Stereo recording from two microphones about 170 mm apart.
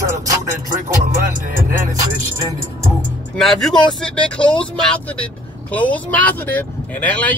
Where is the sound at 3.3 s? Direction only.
Centre (ahead or behind).